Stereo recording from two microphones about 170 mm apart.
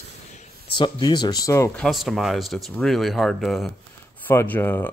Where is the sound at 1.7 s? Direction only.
Centre (ahead or behind).